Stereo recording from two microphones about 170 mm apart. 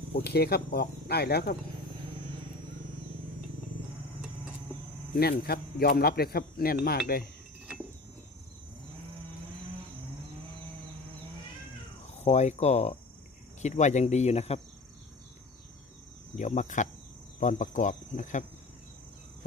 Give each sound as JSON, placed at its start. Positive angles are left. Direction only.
{"t": 0.3, "sound": "speech", "side_deg": 70}
{"t": 5.1, "sound": "speech", "side_deg": 65}
{"t": 12.1, "sound": "speech", "side_deg": 40}
{"t": 16.3, "sound": "speech", "side_deg": 45}